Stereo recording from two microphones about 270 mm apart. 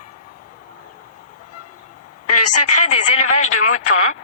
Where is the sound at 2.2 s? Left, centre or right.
Left.